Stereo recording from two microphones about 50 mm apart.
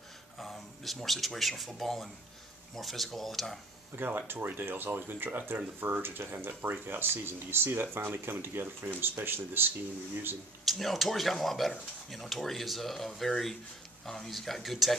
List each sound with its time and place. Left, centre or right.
0.4 s speech: centre
3.9 s speech: right
10.6 s speech: centre